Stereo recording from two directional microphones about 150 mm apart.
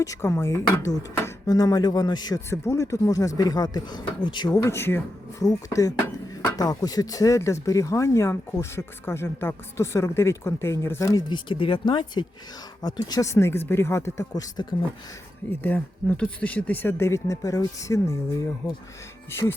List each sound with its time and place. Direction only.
0.0 s speech: 20° left (ahead or behind)
11.3 s speech: 35° left (ahead or behind)
15.6 s speech: 10° left (ahead or behind)